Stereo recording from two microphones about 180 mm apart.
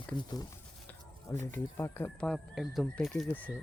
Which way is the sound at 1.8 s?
10° left (ahead or behind).